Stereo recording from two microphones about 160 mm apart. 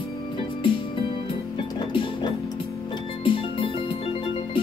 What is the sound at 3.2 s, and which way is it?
Music, 30° left (ahead or behind).